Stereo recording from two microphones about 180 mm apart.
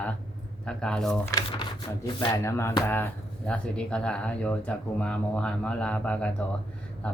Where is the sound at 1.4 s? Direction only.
25° left (ahead or behind).